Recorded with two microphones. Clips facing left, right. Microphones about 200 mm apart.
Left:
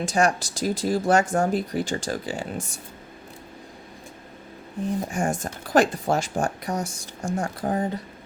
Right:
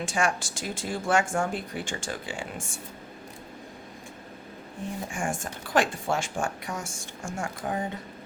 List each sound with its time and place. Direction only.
0.0 s speech: 40° left (ahead or behind)
5.1 s speech: 40° left (ahead or behind)